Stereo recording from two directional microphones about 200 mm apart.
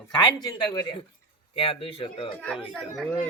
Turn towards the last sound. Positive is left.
turn(degrees=5)  # may be behind; listen again after turning